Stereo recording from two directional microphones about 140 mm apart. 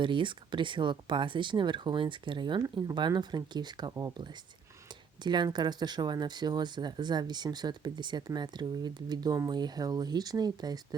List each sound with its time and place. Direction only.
0.0 s speech: 35° right (ahead or behind)